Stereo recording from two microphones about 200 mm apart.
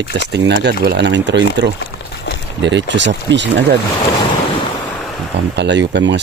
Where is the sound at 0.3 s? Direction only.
60° right (ahead or behind).